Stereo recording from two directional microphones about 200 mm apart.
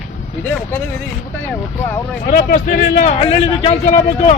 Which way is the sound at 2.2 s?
45° left (ahead or behind).